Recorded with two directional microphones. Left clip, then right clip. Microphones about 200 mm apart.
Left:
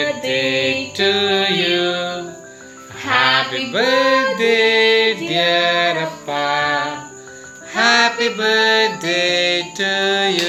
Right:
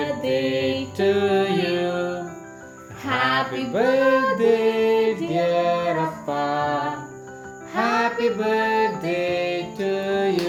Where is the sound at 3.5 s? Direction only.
5° left (ahead or behind).